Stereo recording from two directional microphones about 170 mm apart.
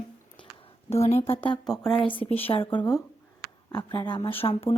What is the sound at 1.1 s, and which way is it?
Speech, 15° left (ahead or behind).